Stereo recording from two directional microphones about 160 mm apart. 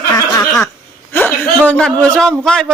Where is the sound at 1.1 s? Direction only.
10° left (ahead or behind).